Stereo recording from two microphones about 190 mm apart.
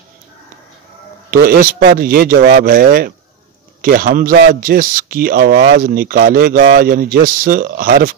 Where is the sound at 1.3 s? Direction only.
50° right (ahead or behind).